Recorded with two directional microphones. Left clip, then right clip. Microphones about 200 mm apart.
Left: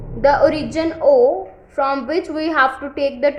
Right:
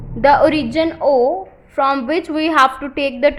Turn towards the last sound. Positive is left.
turn(degrees=-30)  # may be behind; listen again after turning